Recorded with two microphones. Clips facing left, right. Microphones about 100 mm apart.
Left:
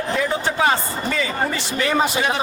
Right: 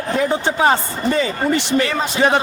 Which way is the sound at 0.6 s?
35° right (ahead or behind).